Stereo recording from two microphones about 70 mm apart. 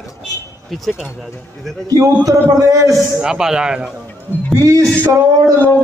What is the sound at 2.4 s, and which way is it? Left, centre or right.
Music, right.